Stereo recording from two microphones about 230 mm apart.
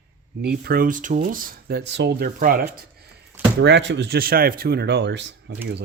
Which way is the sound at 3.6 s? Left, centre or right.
Right.